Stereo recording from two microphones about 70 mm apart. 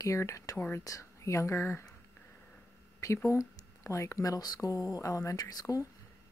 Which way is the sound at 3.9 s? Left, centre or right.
Left.